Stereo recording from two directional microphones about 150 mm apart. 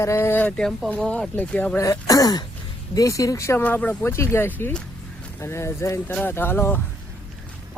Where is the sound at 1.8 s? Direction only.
25° left (ahead or behind).